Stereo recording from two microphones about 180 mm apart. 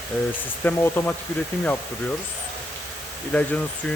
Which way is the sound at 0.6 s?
10° left (ahead or behind).